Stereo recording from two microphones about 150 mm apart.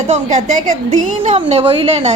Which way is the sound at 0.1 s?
50° right (ahead or behind).